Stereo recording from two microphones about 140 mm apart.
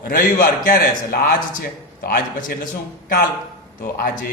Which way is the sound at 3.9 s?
90° left.